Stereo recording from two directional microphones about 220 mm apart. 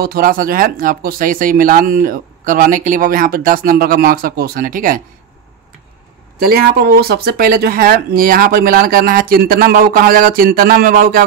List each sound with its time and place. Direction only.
0.0 s speech: 40° right (ahead or behind)
6.5 s speech: 45° right (ahead or behind)